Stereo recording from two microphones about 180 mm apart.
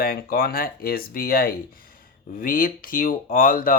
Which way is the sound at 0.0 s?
55° left (ahead or behind).